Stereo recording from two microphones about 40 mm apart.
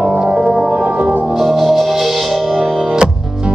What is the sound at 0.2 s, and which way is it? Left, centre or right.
Music, centre.